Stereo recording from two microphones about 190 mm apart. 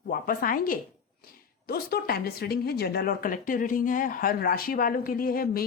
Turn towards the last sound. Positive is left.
turn(degrees=50)  # may be behind; listen again after turning